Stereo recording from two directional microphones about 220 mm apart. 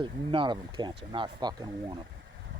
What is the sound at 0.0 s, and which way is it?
Speech, 20° right (ahead or behind).